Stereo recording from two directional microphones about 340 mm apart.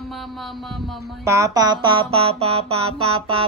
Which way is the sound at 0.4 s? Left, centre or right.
Centre.